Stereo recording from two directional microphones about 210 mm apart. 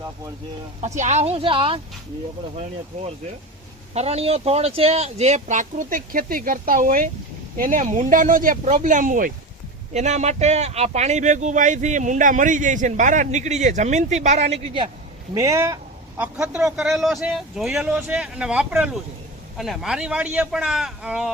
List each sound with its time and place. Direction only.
0.8 s speech: 35° right (ahead or behind)
3.9 s speech: 30° right (ahead or behind)
15.4 s a man's voice: 15° right (ahead or behind)